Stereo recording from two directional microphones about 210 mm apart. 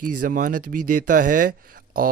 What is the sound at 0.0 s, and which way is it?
Speech, 40° right (ahead or behind).